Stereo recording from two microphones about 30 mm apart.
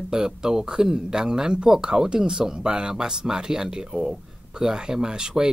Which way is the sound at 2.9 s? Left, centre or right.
Centre.